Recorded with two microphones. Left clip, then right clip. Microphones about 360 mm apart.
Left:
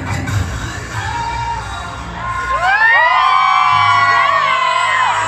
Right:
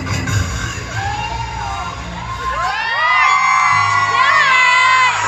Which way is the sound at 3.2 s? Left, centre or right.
Right.